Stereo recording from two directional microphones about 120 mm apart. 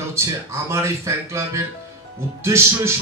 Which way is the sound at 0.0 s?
25° right (ahead or behind).